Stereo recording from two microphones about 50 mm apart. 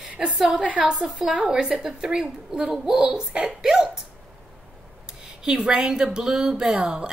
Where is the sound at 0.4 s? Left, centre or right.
Centre.